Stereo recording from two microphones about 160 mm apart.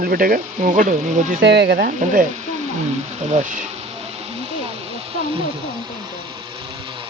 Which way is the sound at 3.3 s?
45° right (ahead or behind).